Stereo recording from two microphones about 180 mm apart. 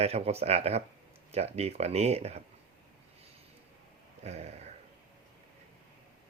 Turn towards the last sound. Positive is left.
turn(degrees=-35)  # may be behind; listen again after turning